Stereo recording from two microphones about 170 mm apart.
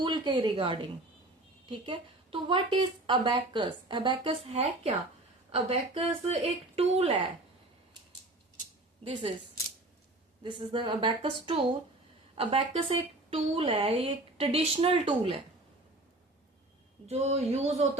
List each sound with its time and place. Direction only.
0.0 s a woman's voice: 25° right (ahead or behind)
9.0 s a woman's voice: 30° right (ahead or behind)
10.4 s a woman's voice: 30° right (ahead or behind)
17.1 s a woman's voice: 40° right (ahead or behind)